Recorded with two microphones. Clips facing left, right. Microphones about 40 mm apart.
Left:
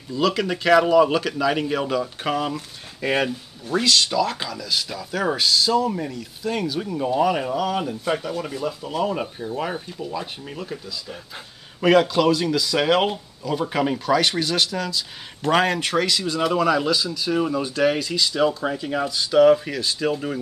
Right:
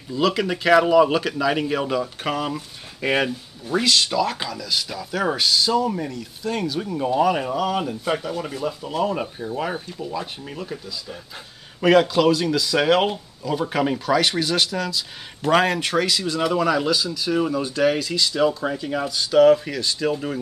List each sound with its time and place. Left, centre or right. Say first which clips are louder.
0.1 s speech: right 1 dB; centre
2.5 s speech: even; centre
3.3 s speech: even; centre